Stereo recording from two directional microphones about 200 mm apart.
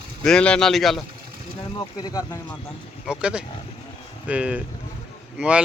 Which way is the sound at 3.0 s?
5° right (ahead or behind).